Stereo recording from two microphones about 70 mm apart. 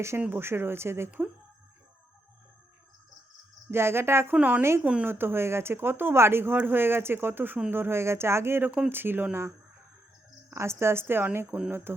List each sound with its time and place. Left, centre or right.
0.3 s speech: right
3.7 s speech: right
4.4 s speech: centre
4.6 s speech: right
10.5 s speech: right